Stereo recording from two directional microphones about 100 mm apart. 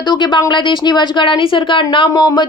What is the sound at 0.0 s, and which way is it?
Speech, 45° left (ahead or behind).